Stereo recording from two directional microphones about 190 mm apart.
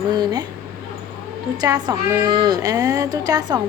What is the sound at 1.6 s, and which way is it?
A woman's voice, 20° right (ahead or behind).